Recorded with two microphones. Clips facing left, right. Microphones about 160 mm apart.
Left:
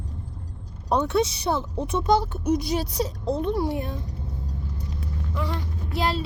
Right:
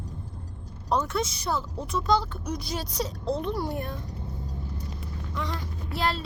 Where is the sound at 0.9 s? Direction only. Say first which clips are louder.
Left 5 dB; 65° left (ahead or behind).